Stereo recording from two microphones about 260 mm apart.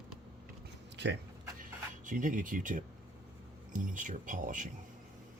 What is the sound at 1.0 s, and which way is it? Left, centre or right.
Speech, right.